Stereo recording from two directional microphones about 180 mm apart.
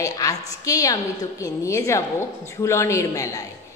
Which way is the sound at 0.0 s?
20° left (ahead or behind).